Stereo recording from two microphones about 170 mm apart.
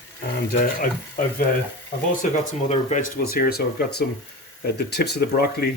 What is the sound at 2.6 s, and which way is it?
Speech, 45° left (ahead or behind).